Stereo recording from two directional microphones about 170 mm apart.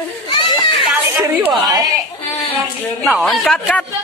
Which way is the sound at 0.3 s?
25° left (ahead or behind).